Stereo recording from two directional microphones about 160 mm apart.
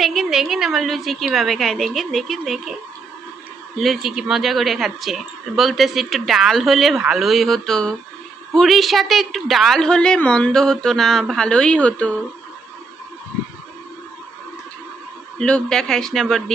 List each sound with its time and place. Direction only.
0.0 s speech: centre (ahead or behind)
3.8 s speech: centre (ahead or behind)
15.4 s speech: 5° left (ahead or behind)